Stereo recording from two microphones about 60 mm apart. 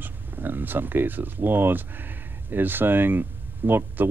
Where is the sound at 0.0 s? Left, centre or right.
Right.